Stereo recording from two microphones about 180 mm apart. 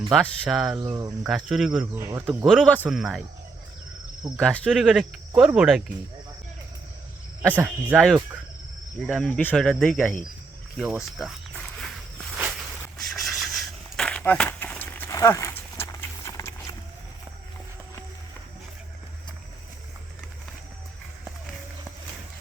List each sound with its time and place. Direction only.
0.1 s speech: centre (ahead or behind)
0.9 s cricket: 20° right (ahead or behind)
1.2 s speech: 5° right (ahead or behind)
4.4 s speech: 5° left (ahead or behind)
7.5 s speech: 10° right (ahead or behind)
13.0 s a sound: centre (ahead or behind)